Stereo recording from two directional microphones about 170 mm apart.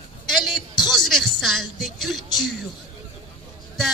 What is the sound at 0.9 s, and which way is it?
Speech, centre (ahead or behind).